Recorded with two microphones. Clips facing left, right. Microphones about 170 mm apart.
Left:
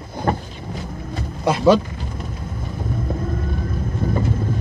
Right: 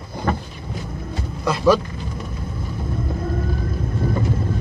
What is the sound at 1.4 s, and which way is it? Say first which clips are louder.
Speech: left 2 dB; 20° left (ahead or behind).